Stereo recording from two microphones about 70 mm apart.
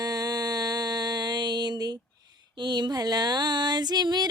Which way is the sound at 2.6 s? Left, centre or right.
Right.